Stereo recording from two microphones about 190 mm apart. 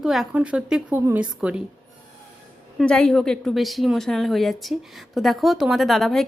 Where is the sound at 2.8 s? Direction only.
5° left (ahead or behind).